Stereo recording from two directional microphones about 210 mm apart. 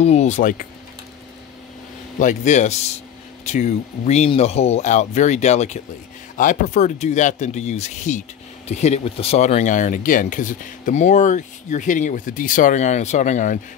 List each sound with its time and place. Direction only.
0.0 s speech: 30° left (ahead or behind)
2.1 s speech: 35° left (ahead or behind)